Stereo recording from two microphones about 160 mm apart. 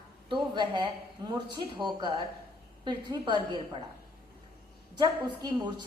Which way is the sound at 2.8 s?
25° right (ahead or behind).